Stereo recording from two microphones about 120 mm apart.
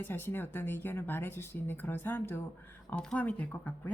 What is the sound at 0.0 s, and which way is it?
A woman's voice, 20° left (ahead or behind).